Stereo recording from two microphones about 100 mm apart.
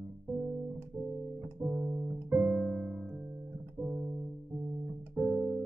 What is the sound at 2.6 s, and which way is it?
Music, 5° right (ahead or behind).